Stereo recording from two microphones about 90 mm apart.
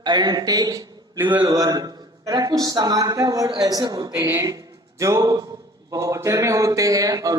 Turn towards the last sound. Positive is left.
turn(degrees=-40)  # may be behind; listen again after turning